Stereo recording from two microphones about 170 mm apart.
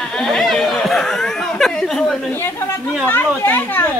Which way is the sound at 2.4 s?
15° left (ahead or behind).